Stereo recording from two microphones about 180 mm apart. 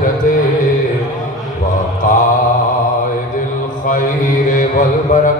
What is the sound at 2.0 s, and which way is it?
Mantra, 45° left (ahead or behind).